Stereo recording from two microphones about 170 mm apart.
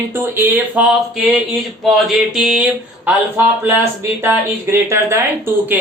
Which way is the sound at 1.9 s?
Centre (ahead or behind).